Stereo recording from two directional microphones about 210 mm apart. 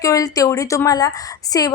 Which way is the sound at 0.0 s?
15° left (ahead or behind).